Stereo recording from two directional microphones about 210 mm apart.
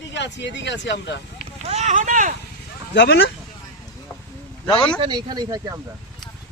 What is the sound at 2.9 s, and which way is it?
Speech, 55° left (ahead or behind).